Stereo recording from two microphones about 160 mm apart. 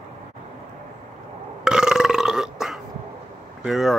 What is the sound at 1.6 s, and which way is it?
Burping, 5° right (ahead or behind).